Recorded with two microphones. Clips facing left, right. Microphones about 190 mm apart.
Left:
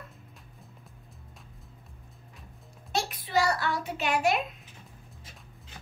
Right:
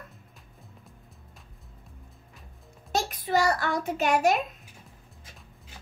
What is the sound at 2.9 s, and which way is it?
A child's voice, 45° right (ahead or behind).